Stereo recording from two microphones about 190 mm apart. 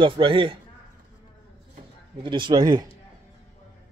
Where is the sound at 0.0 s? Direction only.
25° right (ahead or behind).